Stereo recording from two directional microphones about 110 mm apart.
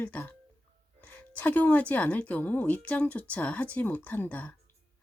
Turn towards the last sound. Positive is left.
turn(degrees=15)  # may be behind; listen again after turning